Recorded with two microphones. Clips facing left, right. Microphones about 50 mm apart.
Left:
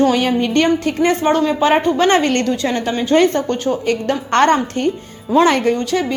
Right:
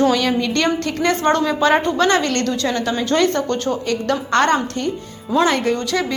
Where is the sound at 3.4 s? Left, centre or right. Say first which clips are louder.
Left 2 dB; centre.